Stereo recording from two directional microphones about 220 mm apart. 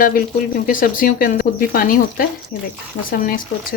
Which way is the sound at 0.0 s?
40° left (ahead or behind).